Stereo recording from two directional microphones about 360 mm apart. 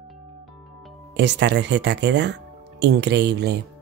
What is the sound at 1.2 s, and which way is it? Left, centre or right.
Speech, right.